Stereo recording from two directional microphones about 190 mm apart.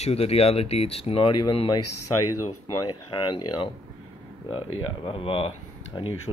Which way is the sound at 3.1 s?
25° left (ahead or behind).